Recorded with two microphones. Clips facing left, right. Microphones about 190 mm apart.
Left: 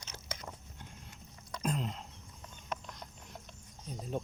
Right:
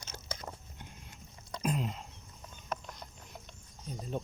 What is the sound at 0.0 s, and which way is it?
Biting, 35° right (ahead or behind).